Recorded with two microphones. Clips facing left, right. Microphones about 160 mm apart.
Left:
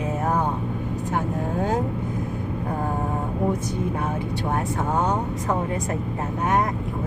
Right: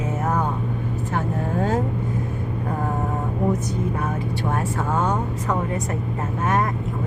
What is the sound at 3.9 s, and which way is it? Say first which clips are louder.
Speech: right 1 dB; 20° left (ahead or behind).